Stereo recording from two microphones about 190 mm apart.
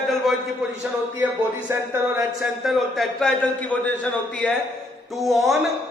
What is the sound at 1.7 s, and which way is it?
Speech, 10° right (ahead or behind).